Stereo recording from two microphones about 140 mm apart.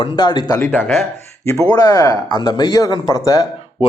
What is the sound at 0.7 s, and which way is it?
Speech, 15° left (ahead or behind).